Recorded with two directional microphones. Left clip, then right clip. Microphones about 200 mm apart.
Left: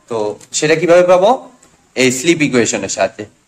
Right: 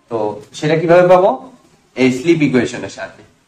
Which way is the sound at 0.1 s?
60° left (ahead or behind).